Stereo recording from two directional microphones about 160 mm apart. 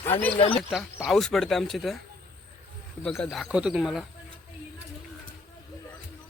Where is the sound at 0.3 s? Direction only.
35° left (ahead or behind).